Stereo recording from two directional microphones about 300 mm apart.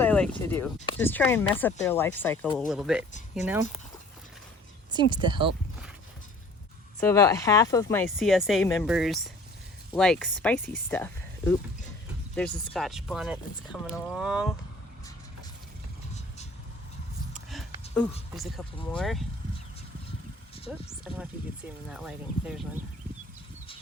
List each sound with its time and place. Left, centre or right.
0.0 s speech: centre
4.9 s speech: centre
7.0 s speech: centre
17.3 s a sound: centre
18.3 s speech: centre
20.7 s speech: centre